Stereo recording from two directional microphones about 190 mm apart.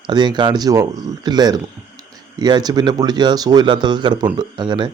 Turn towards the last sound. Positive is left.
turn(degrees=-25)  # may be behind; listen again after turning